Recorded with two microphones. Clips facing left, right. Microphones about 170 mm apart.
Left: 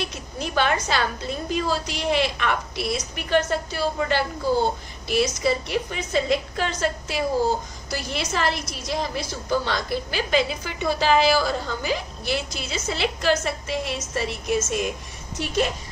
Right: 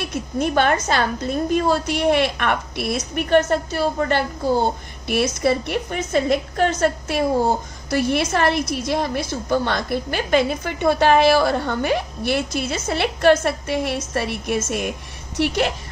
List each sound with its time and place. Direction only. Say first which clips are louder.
0.0 s a woman's voice: right 7 dB; 50° right (ahead or behind)
5.0 s a woman's voice: right 3 dB; 60° right (ahead or behind)